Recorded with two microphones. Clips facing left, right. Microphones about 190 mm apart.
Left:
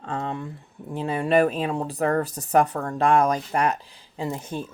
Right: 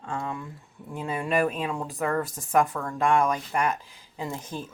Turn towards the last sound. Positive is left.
turn(degrees=20)  # may be behind; listen again after turning